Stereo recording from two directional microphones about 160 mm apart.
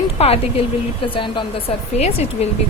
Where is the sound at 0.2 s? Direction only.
40° left (ahead or behind).